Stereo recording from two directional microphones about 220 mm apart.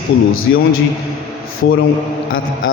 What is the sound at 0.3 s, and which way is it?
Speech, 65° left (ahead or behind).